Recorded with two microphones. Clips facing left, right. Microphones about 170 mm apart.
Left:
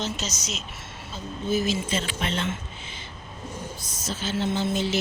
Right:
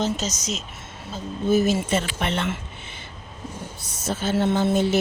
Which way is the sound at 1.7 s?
65° right (ahead or behind).